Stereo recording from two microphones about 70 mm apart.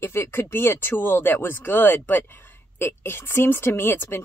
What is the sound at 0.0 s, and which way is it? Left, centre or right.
Speech, left.